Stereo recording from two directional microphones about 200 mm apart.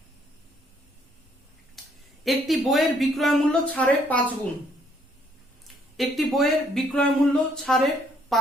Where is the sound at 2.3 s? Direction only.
Centre (ahead or behind).